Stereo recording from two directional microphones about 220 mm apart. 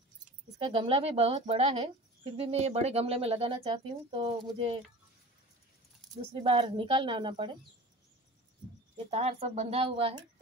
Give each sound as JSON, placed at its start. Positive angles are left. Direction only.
{"t": 0.6, "sound": "speech", "side_deg": -25}
{"t": 6.3, "sound": "speech", "side_deg": -25}
{"t": 8.9, "sound": "speech", "side_deg": -30}